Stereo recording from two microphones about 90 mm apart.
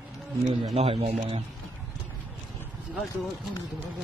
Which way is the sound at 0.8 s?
90° right.